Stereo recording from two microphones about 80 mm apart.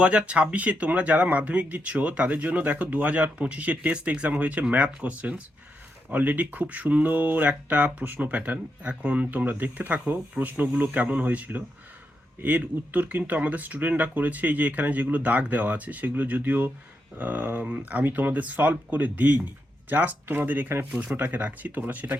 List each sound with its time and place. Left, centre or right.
0.0 s speech: centre